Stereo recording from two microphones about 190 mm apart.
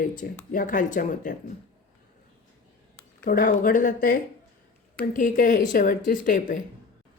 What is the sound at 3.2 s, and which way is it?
Speech, 45° left (ahead or behind).